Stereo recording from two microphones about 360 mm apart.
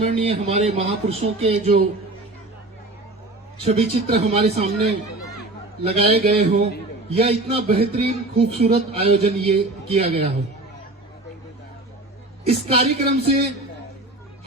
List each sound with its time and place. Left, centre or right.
0.0 s a man's voice: centre
3.6 s a man's voice: centre
12.5 s a man's voice: centre